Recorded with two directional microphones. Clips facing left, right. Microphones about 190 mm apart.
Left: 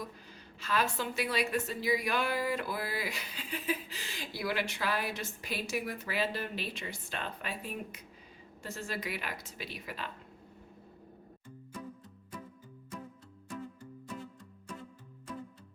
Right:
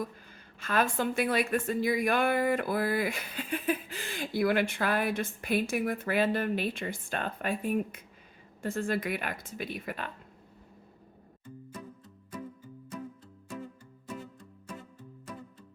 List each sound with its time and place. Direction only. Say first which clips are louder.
0.0 s a woman's voice: right 6 dB; 50° right (ahead or behind)